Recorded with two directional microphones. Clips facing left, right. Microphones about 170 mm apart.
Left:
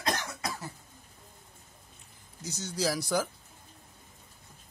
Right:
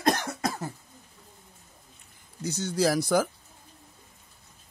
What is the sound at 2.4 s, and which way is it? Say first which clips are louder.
Speech: right 7 dB; 60° right (ahead or behind).